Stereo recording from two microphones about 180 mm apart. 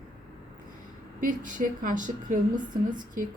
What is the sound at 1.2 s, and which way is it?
A woman's voice, 50° right (ahead or behind).